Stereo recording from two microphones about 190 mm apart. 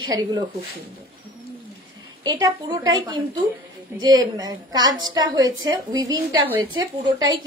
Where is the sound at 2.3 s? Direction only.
20° right (ahead or behind).